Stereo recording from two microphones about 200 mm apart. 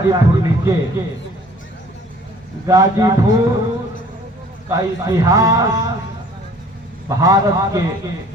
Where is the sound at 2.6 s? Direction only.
15° right (ahead or behind).